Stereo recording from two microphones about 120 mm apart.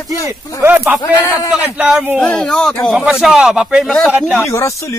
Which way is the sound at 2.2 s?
10° left (ahead or behind).